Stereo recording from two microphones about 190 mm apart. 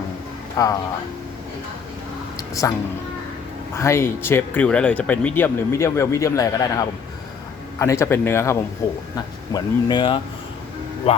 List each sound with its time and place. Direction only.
0.5 s speech: 20° left (ahead or behind)
2.6 s speech: 15° left (ahead or behind); by 11.2 s 30° left (ahead or behind)